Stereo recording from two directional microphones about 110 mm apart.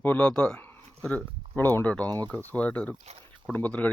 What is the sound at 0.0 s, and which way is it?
Speech, 10° left (ahead or behind).